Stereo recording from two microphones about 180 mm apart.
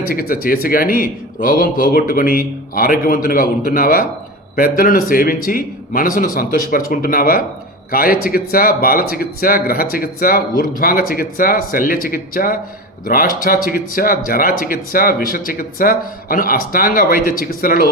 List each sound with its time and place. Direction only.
0.1 s speech: 55° left (ahead or behind)